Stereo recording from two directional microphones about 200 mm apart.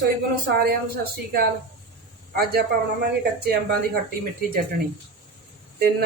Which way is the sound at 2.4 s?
50° right (ahead or behind).